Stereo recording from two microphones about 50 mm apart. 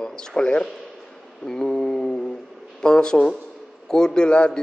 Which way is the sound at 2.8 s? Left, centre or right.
Centre.